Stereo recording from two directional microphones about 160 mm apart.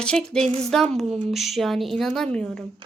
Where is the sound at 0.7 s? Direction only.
Centre (ahead or behind).